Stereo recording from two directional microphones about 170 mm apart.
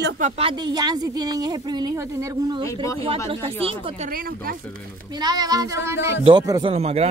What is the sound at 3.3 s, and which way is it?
Speech, 35° right (ahead or behind).